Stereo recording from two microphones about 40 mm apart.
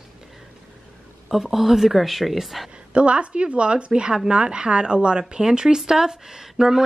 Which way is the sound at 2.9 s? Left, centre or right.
Right.